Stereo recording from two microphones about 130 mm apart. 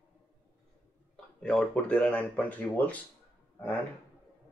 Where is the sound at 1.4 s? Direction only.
5° left (ahead or behind).